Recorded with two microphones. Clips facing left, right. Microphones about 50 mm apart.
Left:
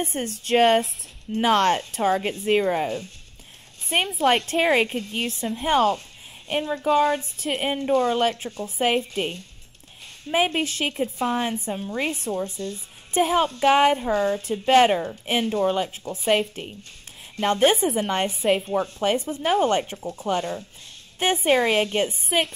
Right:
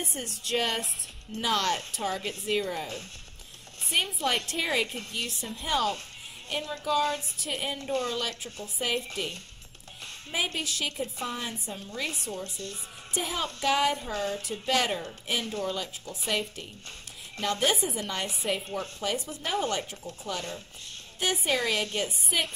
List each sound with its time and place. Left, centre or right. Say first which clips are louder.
0.0 s a woman's voice: left 8 dB; left
4.5 s a woman's voice: left 9 dB; left
10.3 s a woman's voice: left 9 dB; left
17.4 s a woman's voice: left 8 dB; left